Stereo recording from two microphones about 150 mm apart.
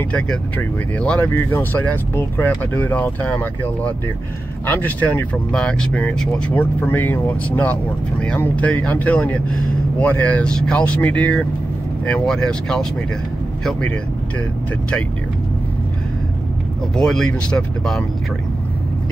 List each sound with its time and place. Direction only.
0.1 s speech: 10° left (ahead or behind)
16.9 s speech: 5° left (ahead or behind)